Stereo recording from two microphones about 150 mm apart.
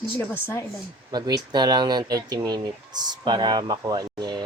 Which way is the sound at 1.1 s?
25° right (ahead or behind).